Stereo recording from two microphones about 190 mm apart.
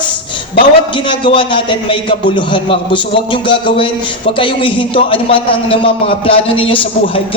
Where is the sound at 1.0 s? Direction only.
25° left (ahead or behind).